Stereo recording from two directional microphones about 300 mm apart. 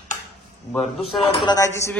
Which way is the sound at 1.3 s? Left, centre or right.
Centre.